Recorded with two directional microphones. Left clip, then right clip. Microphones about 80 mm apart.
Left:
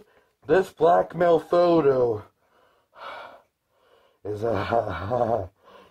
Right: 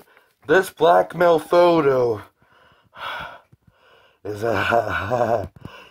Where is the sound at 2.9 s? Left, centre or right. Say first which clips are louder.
Right 8 dB; right.